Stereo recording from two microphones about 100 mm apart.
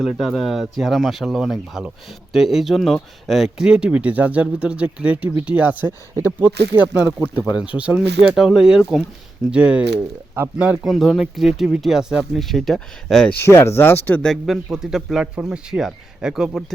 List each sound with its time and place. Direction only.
0.0 s speech: 5° right (ahead or behind)
10.8 s speech: centre (ahead or behind)
13.4 s speech: 25° left (ahead or behind)
14.2 s speech: centre (ahead or behind)